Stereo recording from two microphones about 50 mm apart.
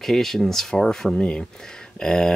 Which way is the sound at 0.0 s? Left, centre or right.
Centre.